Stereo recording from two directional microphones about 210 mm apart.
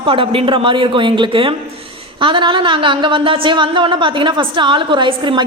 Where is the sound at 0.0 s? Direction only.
25° right (ahead or behind).